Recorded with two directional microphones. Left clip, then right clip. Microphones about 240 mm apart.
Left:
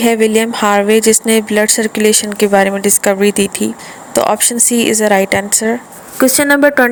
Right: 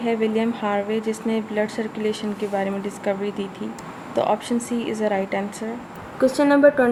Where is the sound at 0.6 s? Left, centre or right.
Left.